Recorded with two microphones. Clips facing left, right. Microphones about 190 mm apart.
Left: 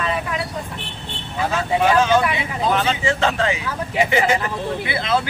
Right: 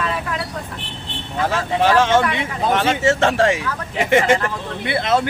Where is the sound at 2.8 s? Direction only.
70° right (ahead or behind).